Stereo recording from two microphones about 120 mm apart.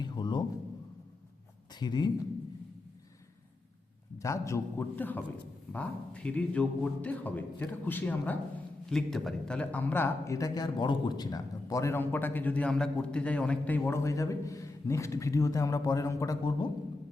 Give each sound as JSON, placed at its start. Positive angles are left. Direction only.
{"t": 0.0, "sound": "a sound", "side_deg": 40}
{"t": 1.7, "sound": "speech", "side_deg": 35}
{"t": 4.2, "sound": "a man's voice", "side_deg": 25}
{"t": 14.0, "sound": "a man's voice", "side_deg": 25}